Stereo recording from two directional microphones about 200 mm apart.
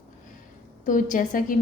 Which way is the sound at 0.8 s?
40° left (ahead or behind).